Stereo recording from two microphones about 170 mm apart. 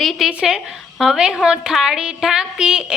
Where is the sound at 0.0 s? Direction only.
Centre (ahead or behind).